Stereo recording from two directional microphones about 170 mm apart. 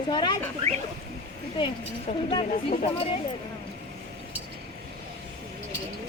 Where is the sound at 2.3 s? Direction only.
30° left (ahead or behind).